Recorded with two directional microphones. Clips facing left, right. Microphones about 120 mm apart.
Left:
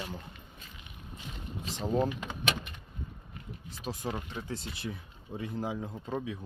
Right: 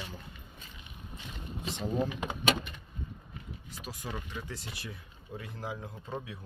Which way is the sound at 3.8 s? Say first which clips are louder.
Left 5 dB; 30° left (ahead or behind).